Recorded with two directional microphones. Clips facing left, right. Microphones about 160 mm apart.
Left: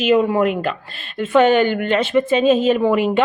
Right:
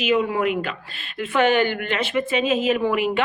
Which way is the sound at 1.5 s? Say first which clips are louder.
Left 5 dB; 25° left (ahead or behind).